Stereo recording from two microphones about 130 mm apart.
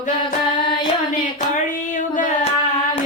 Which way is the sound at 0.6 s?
40° left (ahead or behind).